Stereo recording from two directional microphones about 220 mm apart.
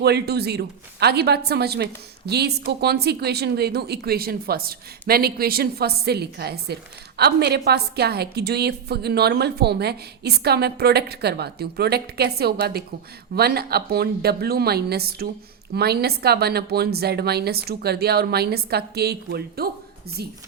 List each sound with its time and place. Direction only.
0.0 s a woman's voice: 45° right (ahead or behind)